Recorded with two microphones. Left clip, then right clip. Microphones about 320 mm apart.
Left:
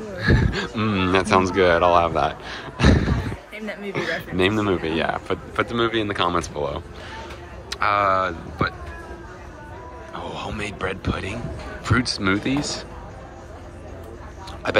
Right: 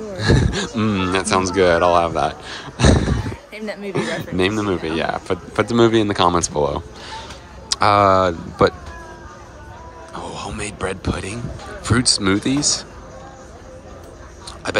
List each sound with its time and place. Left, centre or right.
0.2 s a man's voice: centre
3.6 s speech: right
3.9 s a man's voice: centre
10.1 s a man's voice: centre
14.6 s a man's voice: centre